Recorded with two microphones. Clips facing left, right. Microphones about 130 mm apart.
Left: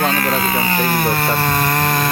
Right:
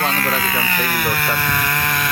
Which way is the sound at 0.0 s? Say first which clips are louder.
Left 3 dB; 25° left (ahead or behind).